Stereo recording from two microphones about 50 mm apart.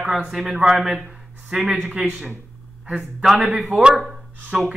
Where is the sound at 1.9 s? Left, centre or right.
Centre.